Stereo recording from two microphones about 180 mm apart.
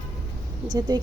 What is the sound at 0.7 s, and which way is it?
Speech, 25° right (ahead or behind).